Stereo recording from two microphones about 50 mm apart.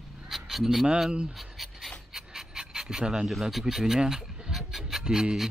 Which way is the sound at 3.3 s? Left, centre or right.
Centre.